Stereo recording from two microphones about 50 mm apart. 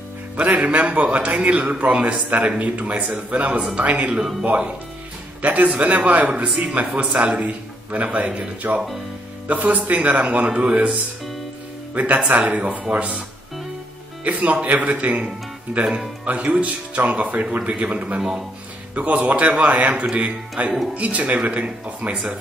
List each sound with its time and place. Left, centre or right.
0.4 s a man's voice: right
5.4 s a man's voice: right
11.9 s a man's voice: right
14.2 s a man's voice: right
15.2 s speech: centre
16.3 s a man's voice: right